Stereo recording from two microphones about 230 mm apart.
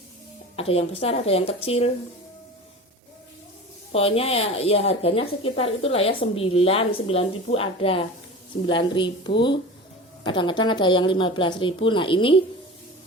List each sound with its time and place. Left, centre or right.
0.5 s speech: left
3.9 s speech: left